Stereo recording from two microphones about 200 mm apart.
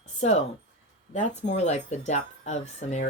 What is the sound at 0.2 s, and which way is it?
Speech, 30° left (ahead or behind).